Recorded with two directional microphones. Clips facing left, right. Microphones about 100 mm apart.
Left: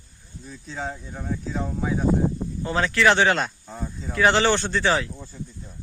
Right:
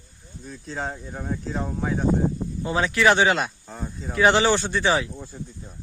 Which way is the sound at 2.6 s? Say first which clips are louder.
Even; 15° right (ahead or behind).